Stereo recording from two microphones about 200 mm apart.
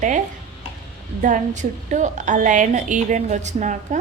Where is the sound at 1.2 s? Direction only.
40° right (ahead or behind).